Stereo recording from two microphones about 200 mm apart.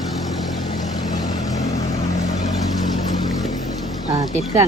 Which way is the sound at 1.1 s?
35° left (ahead or behind).